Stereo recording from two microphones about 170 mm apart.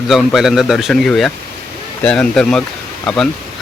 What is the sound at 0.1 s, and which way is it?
Speech, centre (ahead or behind).